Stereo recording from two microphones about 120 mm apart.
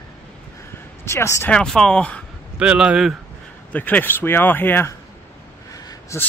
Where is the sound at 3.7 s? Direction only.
15° left (ahead or behind).